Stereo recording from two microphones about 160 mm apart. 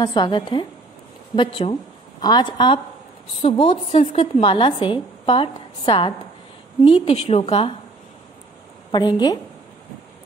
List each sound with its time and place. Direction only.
0.0 s a woman's voice: 25° left (ahead or behind)
8.9 s a woman's voice: 25° left (ahead or behind)